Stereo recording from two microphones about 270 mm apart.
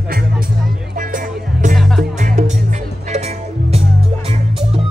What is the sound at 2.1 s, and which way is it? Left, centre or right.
Music, right.